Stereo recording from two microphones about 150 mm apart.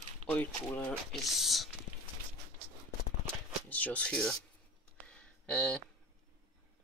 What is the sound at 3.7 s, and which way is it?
Speech, 10° left (ahead or behind).